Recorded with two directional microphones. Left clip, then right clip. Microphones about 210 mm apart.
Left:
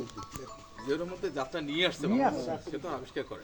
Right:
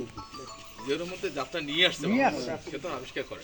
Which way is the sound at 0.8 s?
5° left (ahead or behind).